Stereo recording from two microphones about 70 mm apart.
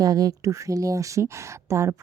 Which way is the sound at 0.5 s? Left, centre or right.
Right.